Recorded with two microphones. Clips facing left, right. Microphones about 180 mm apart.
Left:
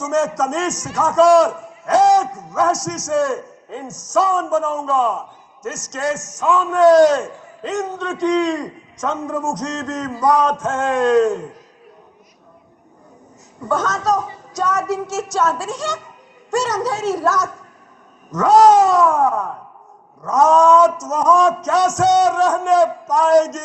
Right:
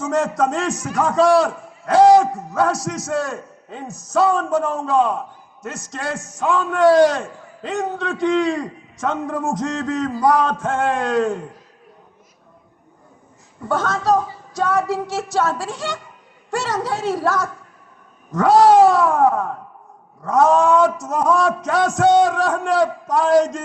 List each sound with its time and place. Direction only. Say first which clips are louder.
0.1 s a man's voice: left 1 dB; 45° left (ahead or behind)
13.7 s a man's voice: even; 45° left (ahead or behind)